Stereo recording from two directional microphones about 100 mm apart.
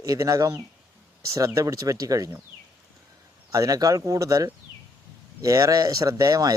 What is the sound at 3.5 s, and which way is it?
Speech, 35° right (ahead or behind).